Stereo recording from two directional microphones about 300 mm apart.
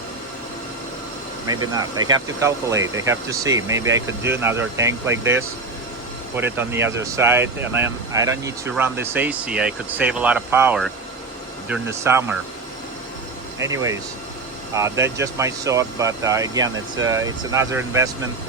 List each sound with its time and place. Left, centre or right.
1.5 s speech: centre
13.6 s speech: centre